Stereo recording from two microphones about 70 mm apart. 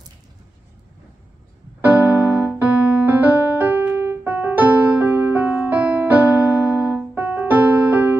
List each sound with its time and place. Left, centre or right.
1.8 s keyboard: right